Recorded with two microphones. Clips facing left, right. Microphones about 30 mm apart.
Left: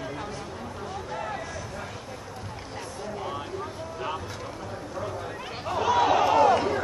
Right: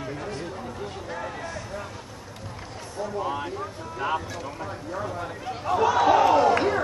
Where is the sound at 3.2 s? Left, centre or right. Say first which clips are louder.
Right 5 dB; centre.